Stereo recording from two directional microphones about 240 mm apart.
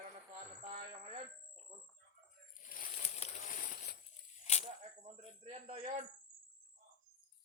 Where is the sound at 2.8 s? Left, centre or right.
Left.